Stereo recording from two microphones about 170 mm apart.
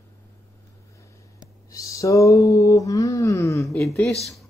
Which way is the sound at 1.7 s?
20° left (ahead or behind).